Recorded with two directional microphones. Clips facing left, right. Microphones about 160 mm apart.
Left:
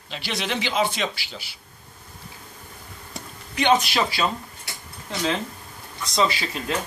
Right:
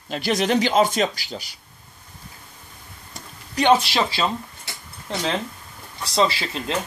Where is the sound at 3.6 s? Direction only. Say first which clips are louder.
Right 2 dB; 30° right (ahead or behind).